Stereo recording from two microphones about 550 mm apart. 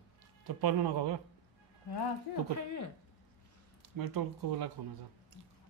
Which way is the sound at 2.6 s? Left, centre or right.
Left.